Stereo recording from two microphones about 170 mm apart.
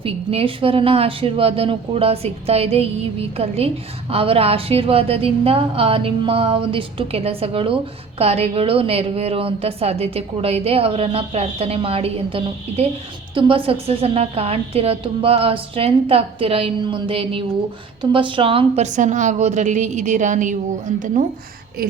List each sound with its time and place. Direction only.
0.0 s a woman's voice: 35° right (ahead or behind)